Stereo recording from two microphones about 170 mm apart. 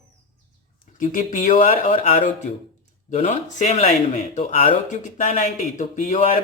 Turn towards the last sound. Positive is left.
turn(degrees=45)  # may be behind; listen again after turning